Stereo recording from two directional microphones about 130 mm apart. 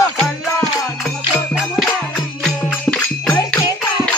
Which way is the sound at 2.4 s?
10° left (ahead or behind).